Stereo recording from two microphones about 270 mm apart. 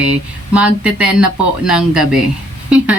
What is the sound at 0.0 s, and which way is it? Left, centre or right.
Speech, centre.